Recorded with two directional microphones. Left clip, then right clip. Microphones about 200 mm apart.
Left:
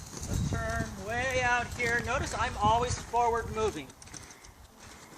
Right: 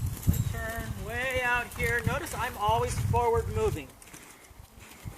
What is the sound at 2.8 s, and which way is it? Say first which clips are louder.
Speech: even; 10° left (ahead or behind).